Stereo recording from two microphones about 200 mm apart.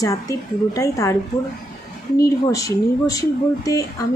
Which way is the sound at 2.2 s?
15° left (ahead or behind).